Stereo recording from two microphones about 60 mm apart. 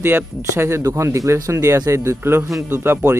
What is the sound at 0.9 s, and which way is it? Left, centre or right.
Speech, right.